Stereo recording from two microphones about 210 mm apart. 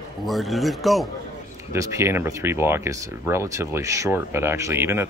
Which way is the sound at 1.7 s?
15° right (ahead or behind).